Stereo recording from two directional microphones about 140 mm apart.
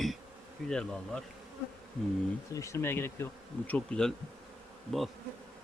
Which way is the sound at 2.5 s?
20° left (ahead or behind).